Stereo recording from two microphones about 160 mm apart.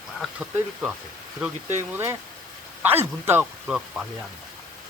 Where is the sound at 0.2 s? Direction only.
10° right (ahead or behind).